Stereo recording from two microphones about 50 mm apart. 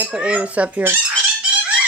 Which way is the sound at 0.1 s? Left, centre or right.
Right.